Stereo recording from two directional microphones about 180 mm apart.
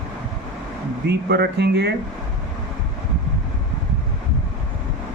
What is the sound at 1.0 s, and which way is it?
Speech, 65° right (ahead or behind).